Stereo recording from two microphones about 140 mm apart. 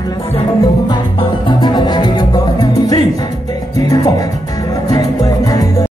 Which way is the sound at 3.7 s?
25° left (ahead or behind).